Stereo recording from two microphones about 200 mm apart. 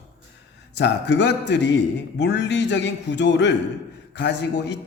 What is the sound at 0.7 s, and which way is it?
A man's voice, 60° left (ahead or behind).